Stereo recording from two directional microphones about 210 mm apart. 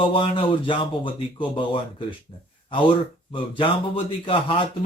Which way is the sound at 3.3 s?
25° left (ahead or behind).